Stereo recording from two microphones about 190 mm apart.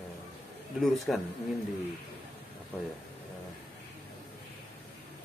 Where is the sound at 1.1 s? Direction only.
Centre (ahead or behind).